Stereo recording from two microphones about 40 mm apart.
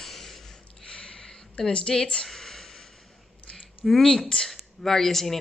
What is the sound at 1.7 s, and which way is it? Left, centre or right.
Speech, left.